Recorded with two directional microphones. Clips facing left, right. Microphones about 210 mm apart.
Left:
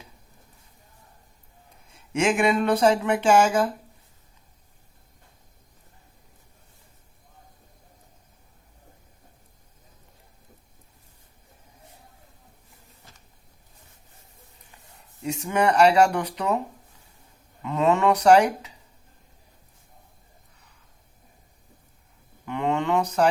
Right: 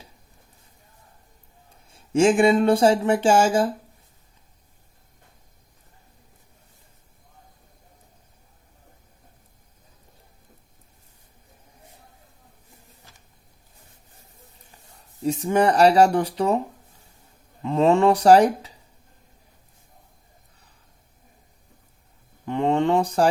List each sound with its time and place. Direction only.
1.9 s speech: 30° right (ahead or behind)
15.2 s speech: 30° right (ahead or behind)
17.6 s speech: 30° right (ahead or behind)
22.4 s a sound: 30° right (ahead or behind)